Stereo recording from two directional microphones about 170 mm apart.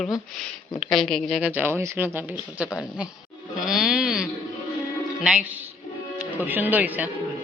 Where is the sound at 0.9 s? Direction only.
Centre (ahead or behind).